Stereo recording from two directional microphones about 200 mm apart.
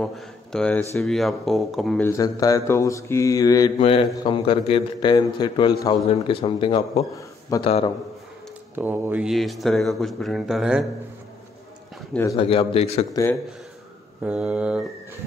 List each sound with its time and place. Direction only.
0.0 s speech: 5° left (ahead or behind)
2.0 s mantra: 15° left (ahead or behind)
4.2 s a man's voice: 25° left (ahead or behind)
7.2 s a sound: 15° left (ahead or behind)
7.6 s a man's voice: 30° left (ahead or behind)
8.7 s speech: 10° right (ahead or behind)
12.1 s mantra: 10° left (ahead or behind)
12.4 s a man's voice: 30° left (ahead or behind)
13.1 s mantra: 15° left (ahead or behind)
14.2 s speech: 5° right (ahead or behind)